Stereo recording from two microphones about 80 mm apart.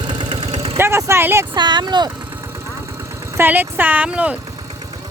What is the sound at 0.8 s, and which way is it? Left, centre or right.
Speech, right.